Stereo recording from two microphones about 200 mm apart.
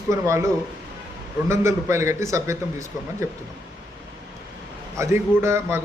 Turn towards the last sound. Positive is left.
turn(degrees=-15)  # may be behind; listen again after turning